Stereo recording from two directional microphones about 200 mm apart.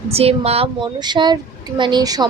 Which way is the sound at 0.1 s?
30° right (ahead or behind).